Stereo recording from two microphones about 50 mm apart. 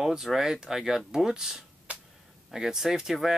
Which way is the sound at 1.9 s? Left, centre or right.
Right.